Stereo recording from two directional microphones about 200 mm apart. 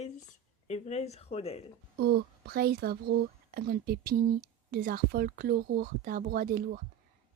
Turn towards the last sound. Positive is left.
turn(degrees=-45)  # may be behind; listen again after turning